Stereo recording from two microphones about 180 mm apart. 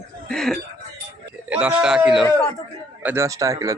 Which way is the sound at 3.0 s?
15° right (ahead or behind).